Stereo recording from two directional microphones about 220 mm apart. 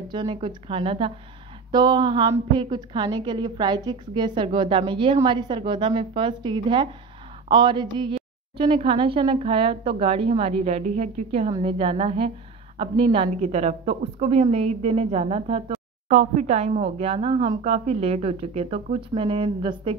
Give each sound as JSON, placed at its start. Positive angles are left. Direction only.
{"t": 0.1, "sound": "a woman's voice", "side_deg": -20}